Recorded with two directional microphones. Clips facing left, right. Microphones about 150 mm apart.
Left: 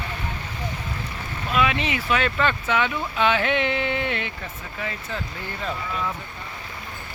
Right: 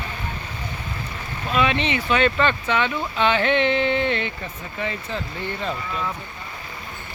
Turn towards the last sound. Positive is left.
turn(degrees=5)  # may be behind; listen again after turning